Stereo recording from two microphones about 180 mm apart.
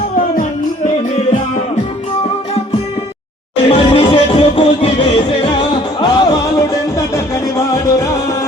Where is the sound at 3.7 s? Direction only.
30° left (ahead or behind).